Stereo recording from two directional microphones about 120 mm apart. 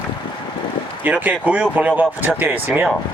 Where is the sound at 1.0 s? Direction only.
15° right (ahead or behind).